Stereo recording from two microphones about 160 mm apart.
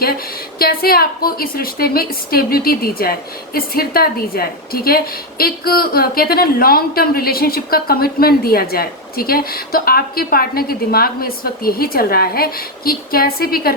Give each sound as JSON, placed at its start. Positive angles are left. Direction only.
{"t": 0.6, "sound": "a woman's voice", "side_deg": 70}